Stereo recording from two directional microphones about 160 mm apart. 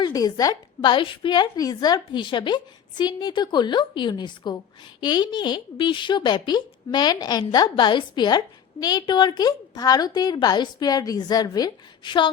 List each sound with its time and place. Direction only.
0.0 s a woman's voice: 25° left (ahead or behind)